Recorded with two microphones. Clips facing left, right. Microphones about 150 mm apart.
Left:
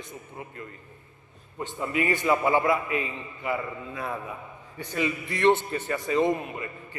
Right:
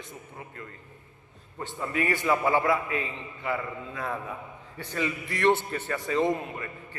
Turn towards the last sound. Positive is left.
turn(degrees=15)  # may be behind; listen again after turning